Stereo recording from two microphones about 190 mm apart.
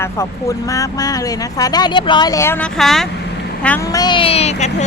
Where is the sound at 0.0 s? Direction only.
15° left (ahead or behind).